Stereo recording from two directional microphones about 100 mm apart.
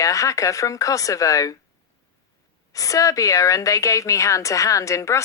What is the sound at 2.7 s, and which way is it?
A woman's voice, 35° left (ahead or behind).